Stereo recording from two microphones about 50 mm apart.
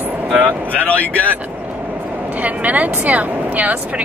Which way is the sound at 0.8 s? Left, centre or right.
Left.